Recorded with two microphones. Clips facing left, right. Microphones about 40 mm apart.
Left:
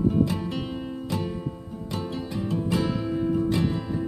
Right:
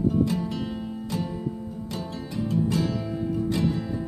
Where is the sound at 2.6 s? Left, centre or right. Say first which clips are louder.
Right 1 dB; left.